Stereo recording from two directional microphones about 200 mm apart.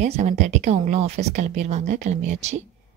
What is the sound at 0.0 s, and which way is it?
A woman's voice, 35° right (ahead or behind).